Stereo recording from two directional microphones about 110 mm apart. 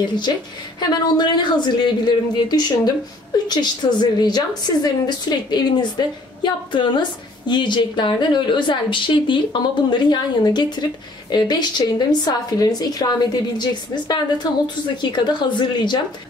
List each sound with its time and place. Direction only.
0.7 s a woman's voice: 40° left (ahead or behind)